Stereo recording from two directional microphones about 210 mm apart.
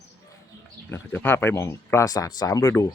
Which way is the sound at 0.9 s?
10° left (ahead or behind).